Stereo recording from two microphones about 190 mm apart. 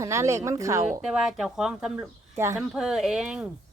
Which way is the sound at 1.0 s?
5° right (ahead or behind).